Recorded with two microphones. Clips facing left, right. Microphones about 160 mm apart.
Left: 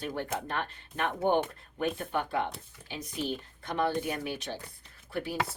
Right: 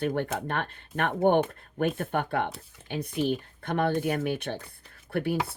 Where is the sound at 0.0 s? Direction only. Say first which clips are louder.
Right 6 dB; 55° right (ahead or behind).